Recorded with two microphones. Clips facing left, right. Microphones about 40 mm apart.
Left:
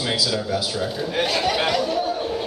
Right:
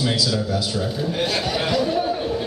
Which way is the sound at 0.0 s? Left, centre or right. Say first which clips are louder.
Right 1 dB; centre.